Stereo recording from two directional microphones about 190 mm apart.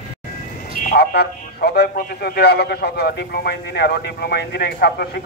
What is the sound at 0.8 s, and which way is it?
A man's voice, 50° left (ahead or behind).